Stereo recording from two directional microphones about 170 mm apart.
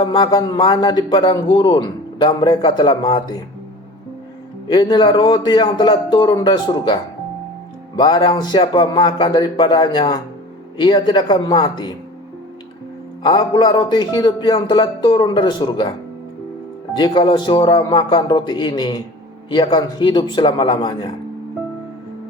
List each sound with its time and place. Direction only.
0.0 s speech: 25° left (ahead or behind)
4.7 s speech: 25° left (ahead or behind)
13.2 s speech: 25° left (ahead or behind)
17.0 s speech: 25° left (ahead or behind)